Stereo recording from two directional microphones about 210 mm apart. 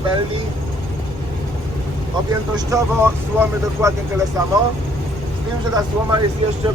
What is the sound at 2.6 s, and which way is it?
Speech, 15° right (ahead or behind).